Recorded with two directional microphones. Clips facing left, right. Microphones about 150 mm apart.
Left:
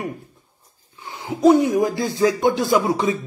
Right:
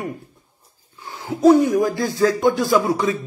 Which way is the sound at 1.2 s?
20° left (ahead or behind).